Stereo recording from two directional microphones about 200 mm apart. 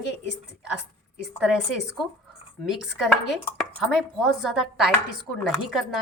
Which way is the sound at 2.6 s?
Centre (ahead or behind).